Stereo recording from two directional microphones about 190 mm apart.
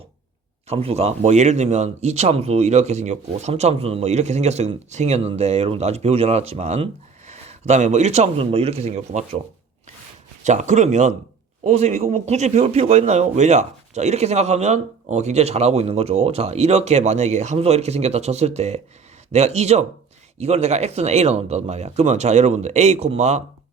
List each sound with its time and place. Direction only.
0.7 s speech: 30° right (ahead or behind)
10.4 s speech: 40° right (ahead or behind)